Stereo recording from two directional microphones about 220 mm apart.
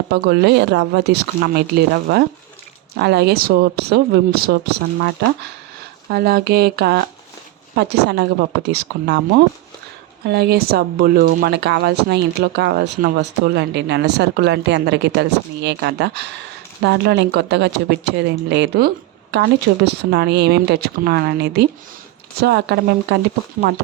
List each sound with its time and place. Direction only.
0.1 s speech: 50° right (ahead or behind)
6.1 s speech: 45° right (ahead or behind)
10.2 s speech: 45° right (ahead or behind)